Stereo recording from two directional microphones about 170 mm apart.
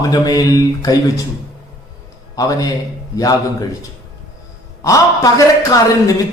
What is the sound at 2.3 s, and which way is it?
Speech, 20° left (ahead or behind).